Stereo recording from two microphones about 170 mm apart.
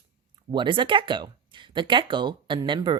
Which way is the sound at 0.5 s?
25° right (ahead or behind).